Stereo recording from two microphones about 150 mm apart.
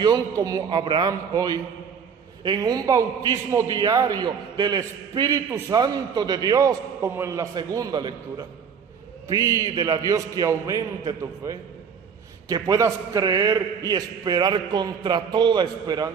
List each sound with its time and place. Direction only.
0.0 s a man's voice: 25° right (ahead or behind)